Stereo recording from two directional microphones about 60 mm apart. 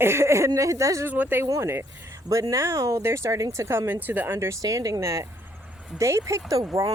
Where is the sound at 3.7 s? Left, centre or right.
Right.